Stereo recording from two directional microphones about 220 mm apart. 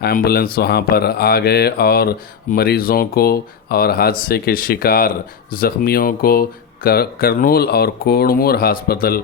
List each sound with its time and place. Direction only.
0.0 s speech: 45° left (ahead or behind)